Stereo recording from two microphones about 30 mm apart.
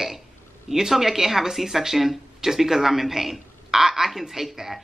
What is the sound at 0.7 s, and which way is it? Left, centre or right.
Speech, centre.